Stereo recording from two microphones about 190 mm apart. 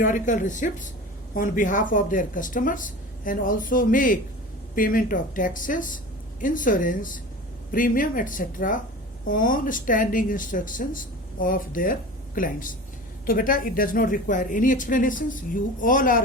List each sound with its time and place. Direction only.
0.0 s speech: 40° left (ahead or behind)